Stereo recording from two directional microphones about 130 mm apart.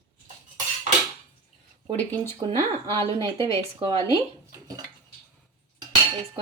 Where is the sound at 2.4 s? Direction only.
35° right (ahead or behind).